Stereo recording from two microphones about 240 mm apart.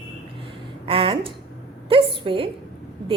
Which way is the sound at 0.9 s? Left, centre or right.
Right.